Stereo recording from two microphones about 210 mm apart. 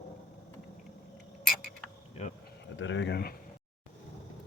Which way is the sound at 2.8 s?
60° left (ahead or behind).